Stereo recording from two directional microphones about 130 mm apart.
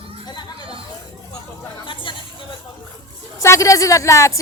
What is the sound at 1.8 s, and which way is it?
Chatter, 40° left (ahead or behind).